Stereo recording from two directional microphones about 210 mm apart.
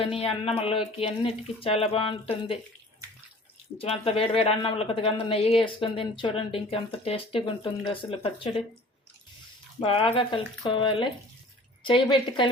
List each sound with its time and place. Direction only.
0.2 s speech: 25° left (ahead or behind)
3.8 s speech: 30° left (ahead or behind)
9.8 s a woman's voice: 25° left (ahead or behind)